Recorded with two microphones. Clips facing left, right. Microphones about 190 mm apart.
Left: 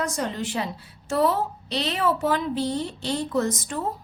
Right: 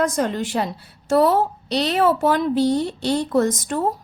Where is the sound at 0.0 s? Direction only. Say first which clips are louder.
Right 7 dB; 55° right (ahead or behind).